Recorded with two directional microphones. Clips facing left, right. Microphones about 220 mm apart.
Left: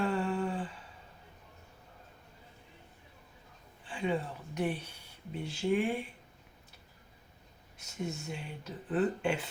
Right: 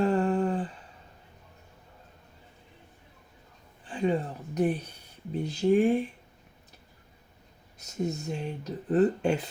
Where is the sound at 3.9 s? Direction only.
40° right (ahead or behind).